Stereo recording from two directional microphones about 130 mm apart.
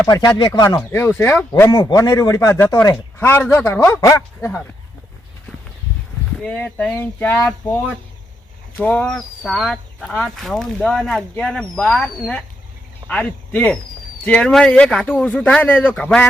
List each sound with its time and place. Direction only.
0.3 s speech: 35° left (ahead or behind)
0.8 s speech: 20° left (ahead or behind)
2.9 s speech: 15° left (ahead or behind)
6.4 s speech: 10° left (ahead or behind)